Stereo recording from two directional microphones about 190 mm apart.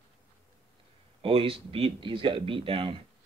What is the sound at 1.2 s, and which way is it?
Speech, 30° right (ahead or behind).